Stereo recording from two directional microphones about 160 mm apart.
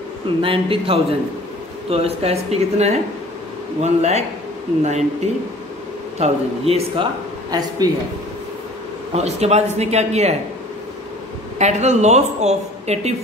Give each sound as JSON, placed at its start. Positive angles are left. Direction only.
{"t": 0.4, "sound": "speech", "side_deg": -35}
{"t": 7.5, "sound": "speech", "side_deg": -25}
{"t": 9.1, "sound": "speech", "side_deg": -40}
{"t": 11.5, "sound": "speech", "side_deg": -45}